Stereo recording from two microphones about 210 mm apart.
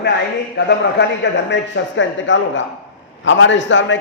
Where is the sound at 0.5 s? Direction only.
55° left (ahead or behind).